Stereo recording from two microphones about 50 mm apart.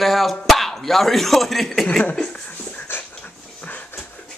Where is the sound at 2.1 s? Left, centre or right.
Centre.